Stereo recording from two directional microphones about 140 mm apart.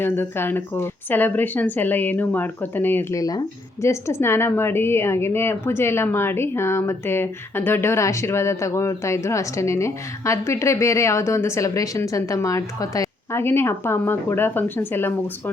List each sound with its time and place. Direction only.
0.0 s speech: 15° left (ahead or behind)